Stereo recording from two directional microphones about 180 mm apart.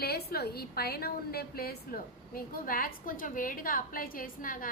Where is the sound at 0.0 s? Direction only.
60° left (ahead or behind).